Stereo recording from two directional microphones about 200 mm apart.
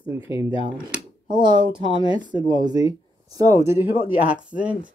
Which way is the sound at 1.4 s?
25° right (ahead or behind).